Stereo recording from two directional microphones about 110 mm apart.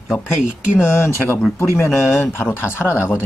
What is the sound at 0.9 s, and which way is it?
Speech, 20° left (ahead or behind).